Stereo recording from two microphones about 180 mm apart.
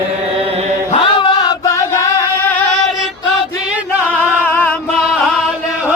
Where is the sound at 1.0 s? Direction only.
25° left (ahead or behind).